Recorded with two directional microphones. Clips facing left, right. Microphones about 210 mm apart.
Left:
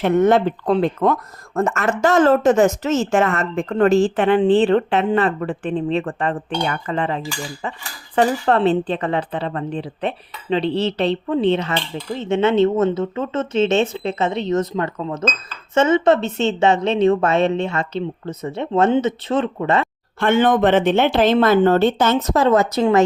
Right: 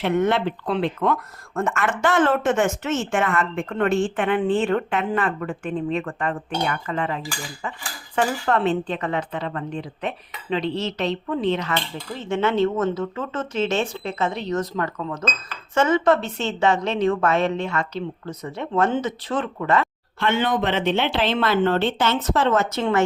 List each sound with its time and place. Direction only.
0.0 s a woman's voice: 45° left (ahead or behind); by 19.9 s 25° left (ahead or behind)
20.1 s speech: 50° left (ahead or behind)